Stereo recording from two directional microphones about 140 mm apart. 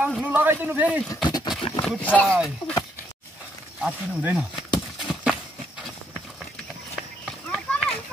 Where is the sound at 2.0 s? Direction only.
10° left (ahead or behind).